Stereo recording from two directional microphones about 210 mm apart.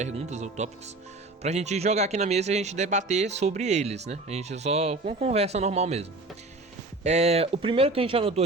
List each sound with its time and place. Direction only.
0.0 s speech: 35° right (ahead or behind)